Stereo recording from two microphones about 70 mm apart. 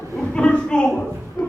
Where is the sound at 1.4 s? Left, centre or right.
Left.